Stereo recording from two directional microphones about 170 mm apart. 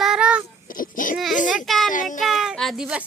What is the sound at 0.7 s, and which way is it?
Babbling, 55° left (ahead or behind).